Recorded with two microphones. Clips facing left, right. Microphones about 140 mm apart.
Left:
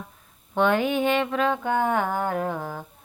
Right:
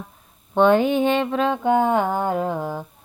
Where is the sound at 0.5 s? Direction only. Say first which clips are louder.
Right 5 dB; 30° right (ahead or behind).